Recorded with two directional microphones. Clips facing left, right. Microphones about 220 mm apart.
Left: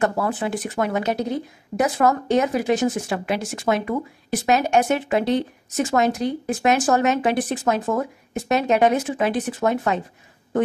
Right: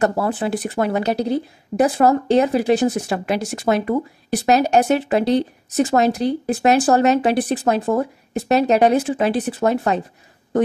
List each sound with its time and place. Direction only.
0.0 s speech: 35° right (ahead or behind)